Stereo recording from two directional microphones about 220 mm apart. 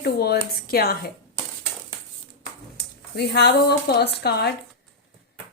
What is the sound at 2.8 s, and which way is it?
Speech, 50° left (ahead or behind).